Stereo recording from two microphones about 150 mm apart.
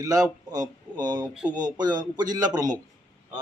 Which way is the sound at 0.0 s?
25° right (ahead or behind).